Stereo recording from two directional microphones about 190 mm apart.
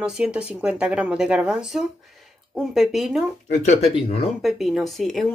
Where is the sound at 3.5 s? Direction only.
40° left (ahead or behind).